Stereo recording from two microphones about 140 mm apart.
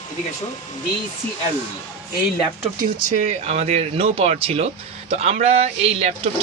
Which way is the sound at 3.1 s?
50° right (ahead or behind).